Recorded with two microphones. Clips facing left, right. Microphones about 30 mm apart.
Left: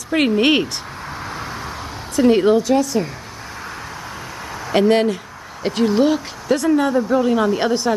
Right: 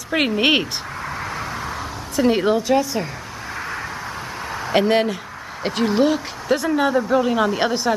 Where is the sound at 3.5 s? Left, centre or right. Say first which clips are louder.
Right 4 dB; right.